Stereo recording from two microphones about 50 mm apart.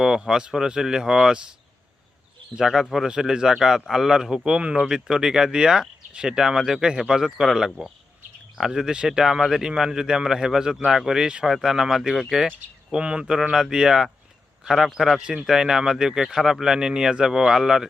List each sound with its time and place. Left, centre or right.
0.0 s speech: centre
2.6 s speech: centre
6.6 s speech: centre
12.9 s speech: centre